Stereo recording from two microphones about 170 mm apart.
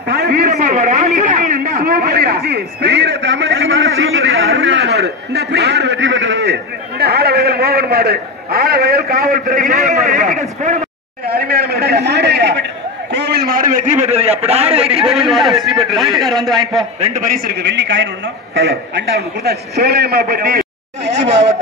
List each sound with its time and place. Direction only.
0.1 s a sound: 70° right (ahead or behind)
0.5 s a man's voice: 45° right (ahead or behind)
11.2 s a man's voice: 65° right (ahead or behind); by 15.1 s 35° right (ahead or behind)
15.1 s a man's voice: centre (ahead or behind)
17.0 s a man's voice: 45° right (ahead or behind); by 21.5 s 90° right